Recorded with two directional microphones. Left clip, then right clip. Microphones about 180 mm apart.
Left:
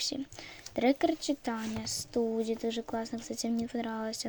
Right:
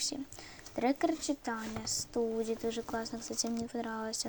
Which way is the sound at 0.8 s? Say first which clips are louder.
Left 3 dB; 40° left (ahead or behind).